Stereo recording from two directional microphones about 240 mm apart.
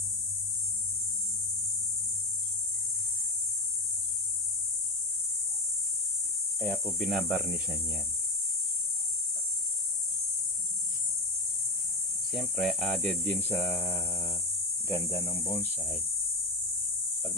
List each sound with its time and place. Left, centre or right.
6.9 s speech: centre
12.3 s speech: centre